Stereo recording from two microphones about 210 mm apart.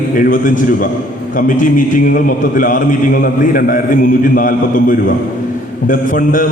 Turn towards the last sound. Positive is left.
turn(degrees=40)  # may be behind; listen again after turning